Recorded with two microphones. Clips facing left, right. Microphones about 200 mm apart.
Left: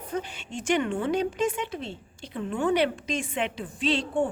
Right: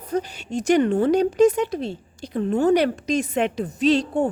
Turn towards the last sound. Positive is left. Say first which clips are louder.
# right 6 dB
turn(degrees=-40)  # may be behind; listen again after turning